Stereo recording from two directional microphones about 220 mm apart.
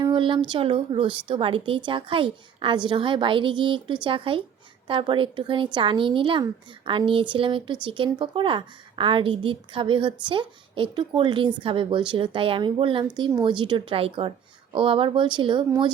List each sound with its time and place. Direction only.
0.0 s speech: 20° right (ahead or behind)